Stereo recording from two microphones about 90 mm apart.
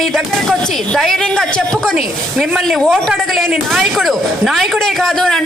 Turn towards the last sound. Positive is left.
turn(degrees=5)  # may be behind; listen again after turning